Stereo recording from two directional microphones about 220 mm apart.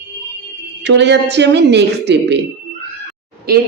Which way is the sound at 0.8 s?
50° right (ahead or behind).